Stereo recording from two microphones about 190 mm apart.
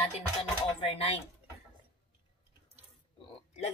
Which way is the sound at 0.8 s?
30° left (ahead or behind).